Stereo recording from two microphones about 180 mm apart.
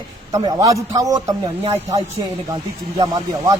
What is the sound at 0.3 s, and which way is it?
Speech, 20° right (ahead or behind).